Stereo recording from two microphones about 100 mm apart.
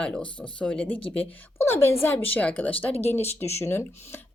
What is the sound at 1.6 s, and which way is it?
Speech, 25° left (ahead or behind).